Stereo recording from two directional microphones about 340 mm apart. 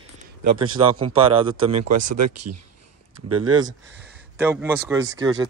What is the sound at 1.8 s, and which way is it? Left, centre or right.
Speech, right.